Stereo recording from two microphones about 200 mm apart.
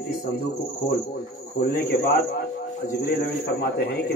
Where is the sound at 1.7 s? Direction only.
50° left (ahead or behind).